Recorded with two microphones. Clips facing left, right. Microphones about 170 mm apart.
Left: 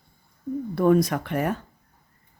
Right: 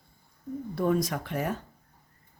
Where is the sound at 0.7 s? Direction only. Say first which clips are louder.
Left 7 dB; 65° left (ahead or behind).